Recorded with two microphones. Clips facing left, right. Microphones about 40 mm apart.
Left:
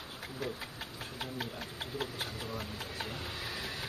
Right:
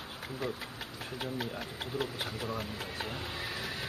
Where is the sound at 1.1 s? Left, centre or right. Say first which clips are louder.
Right 3 dB; centre.